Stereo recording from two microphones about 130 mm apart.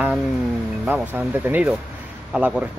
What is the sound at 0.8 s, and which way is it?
Speech, 15° right (ahead or behind).